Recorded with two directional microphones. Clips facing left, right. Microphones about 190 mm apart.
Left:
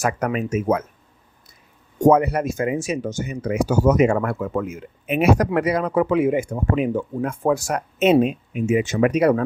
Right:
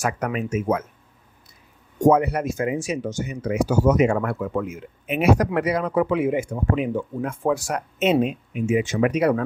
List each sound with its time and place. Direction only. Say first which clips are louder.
0.0 s speech: left 3 dB; 40° left (ahead or behind)
2.0 s speech: left 2 dB; 50° left (ahead or behind)